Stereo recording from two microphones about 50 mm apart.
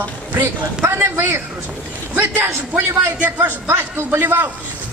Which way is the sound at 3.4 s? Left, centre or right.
Right.